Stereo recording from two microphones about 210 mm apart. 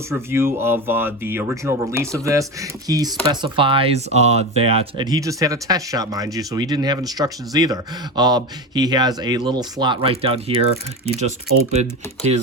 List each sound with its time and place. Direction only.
0.1 s speech: 10° right (ahead or behind); by 12.4 s 30° right (ahead or behind)